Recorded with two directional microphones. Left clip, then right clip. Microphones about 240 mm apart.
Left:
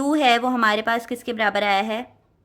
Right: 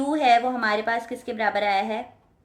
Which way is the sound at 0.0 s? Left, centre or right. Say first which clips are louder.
Left 1 dB; left.